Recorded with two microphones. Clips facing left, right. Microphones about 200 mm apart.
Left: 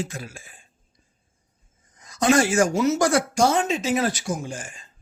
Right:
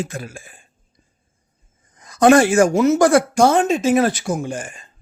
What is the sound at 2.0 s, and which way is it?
A man's voice, 60° right (ahead or behind).